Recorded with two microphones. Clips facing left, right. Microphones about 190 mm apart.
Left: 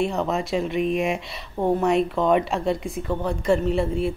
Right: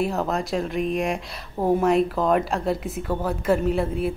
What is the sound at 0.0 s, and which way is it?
Speech, centre (ahead or behind).